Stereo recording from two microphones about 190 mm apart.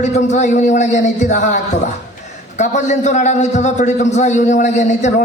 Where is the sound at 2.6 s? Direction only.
40° left (ahead or behind).